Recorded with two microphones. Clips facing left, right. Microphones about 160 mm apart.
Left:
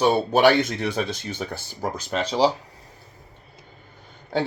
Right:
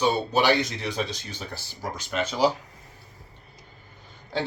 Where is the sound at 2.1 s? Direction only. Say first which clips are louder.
Left 2 dB; 35° left (ahead or behind).